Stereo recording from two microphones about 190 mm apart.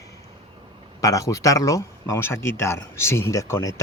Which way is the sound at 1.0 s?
15° left (ahead or behind).